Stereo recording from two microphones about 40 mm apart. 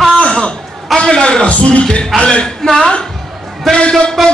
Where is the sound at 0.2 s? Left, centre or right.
Left.